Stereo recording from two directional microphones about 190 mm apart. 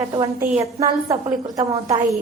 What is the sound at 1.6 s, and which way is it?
Speech, 15° right (ahead or behind).